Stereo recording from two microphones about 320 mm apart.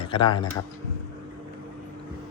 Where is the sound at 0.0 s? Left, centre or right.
Centre.